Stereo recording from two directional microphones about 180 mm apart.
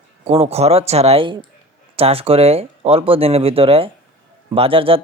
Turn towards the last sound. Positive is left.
turn(degrees=-30)  # may be behind; listen again after turning